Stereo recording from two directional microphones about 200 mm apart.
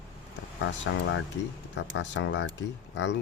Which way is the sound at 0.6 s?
65° left (ahead or behind).